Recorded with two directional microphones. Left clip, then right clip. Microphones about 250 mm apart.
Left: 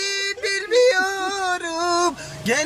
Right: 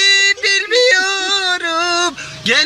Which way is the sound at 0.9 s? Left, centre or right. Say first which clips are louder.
Right 6 dB; centre.